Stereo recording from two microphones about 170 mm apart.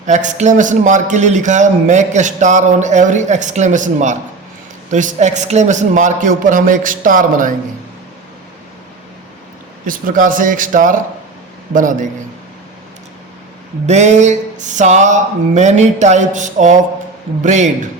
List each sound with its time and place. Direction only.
0.0 s speech: 45° right (ahead or behind)
9.8 s speech: 55° right (ahead or behind)
13.8 s speech: 40° right (ahead or behind)